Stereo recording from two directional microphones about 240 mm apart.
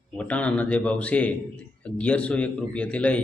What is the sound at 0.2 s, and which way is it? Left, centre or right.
A man's voice, centre.